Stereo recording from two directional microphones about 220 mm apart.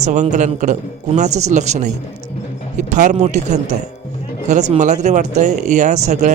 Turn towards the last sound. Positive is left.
turn(degrees=-30)  # may be behind; listen again after turning